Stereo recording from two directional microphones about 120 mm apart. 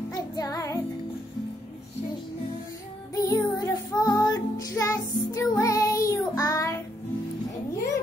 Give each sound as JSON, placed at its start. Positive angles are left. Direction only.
{"t": 0.4, "sound": "music", "side_deg": 30}
{"t": 3.2, "sound": "music", "side_deg": 30}